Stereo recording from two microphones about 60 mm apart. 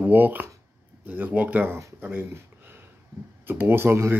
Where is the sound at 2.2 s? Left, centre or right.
Right.